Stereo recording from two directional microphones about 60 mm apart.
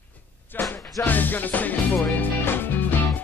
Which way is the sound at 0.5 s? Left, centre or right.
Left.